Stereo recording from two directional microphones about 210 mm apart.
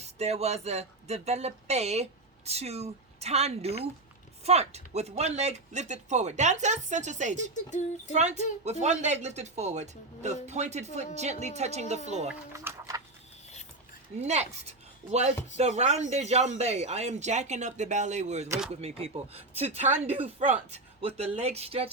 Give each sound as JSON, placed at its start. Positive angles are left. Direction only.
{"t": 0.0, "sound": "speech", "side_deg": -30}
{"t": 7.5, "sound": "speech", "side_deg": 35}
{"t": 8.1, "sound": "speech", "side_deg": -30}
{"t": 12.3, "sound": "a sound", "side_deg": -10}
{"t": 14.2, "sound": "speech", "side_deg": -35}